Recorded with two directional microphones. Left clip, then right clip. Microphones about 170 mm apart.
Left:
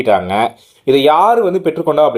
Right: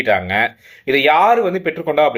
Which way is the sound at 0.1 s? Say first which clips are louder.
Left 4 dB; 40° left (ahead or behind).